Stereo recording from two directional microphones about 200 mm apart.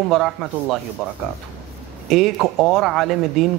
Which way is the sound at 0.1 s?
Centre (ahead or behind).